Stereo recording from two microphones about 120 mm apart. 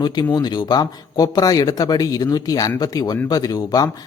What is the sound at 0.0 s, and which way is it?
Speech, 35° left (ahead or behind).